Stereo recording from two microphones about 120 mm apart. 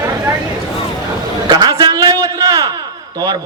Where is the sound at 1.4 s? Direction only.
40° right (ahead or behind).